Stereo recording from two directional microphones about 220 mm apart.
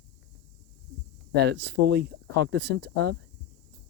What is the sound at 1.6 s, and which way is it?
Speech, 50° right (ahead or behind).